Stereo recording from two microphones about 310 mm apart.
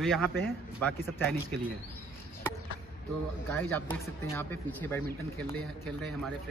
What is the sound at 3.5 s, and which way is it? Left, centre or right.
Speech, centre.